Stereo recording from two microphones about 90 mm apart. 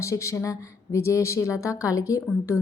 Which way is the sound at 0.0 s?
35° left (ahead or behind).